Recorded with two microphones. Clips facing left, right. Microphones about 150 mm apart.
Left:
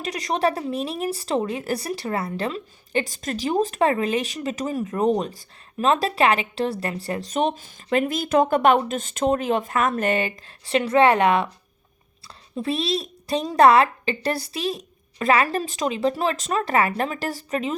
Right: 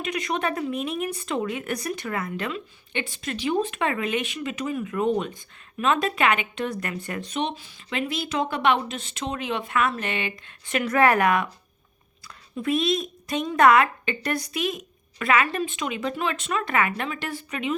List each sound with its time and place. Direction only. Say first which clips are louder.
0.0 s a woman's voice: left 4 dB; 35° left (ahead or behind)
12.5 s a woman's voice: right 1 dB; 30° left (ahead or behind)